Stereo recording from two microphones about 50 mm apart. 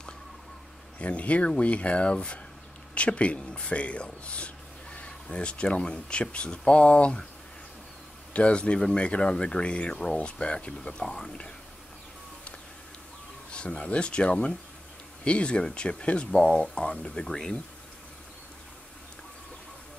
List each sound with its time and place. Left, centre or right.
0.9 s speech: left
8.3 s speech: left
13.5 s speech: centre